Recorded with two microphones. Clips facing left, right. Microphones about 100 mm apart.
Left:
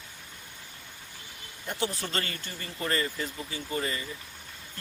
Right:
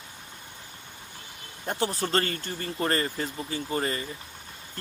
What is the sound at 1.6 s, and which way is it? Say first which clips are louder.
Speech: right 4 dB; 40° right (ahead or behind).